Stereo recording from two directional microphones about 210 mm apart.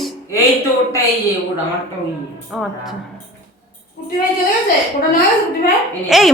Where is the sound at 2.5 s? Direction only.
Centre (ahead or behind).